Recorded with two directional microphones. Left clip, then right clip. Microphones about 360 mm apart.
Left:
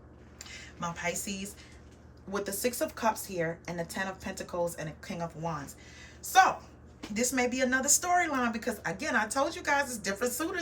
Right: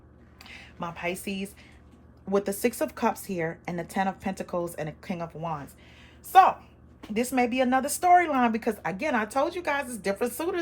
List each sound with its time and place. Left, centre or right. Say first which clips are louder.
0.8 s a woman's voice: right 2 dB; centre
7.1 s a woman's voice: right 4 dB; centre